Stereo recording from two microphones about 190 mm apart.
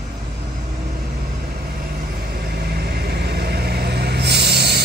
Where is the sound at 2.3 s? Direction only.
55° right (ahead or behind).